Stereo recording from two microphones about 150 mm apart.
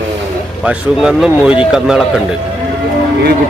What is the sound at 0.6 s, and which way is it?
Speech, 5° right (ahead or behind).